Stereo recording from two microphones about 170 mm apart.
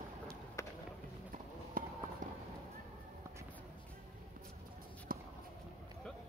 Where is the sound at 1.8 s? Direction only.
55° right (ahead or behind).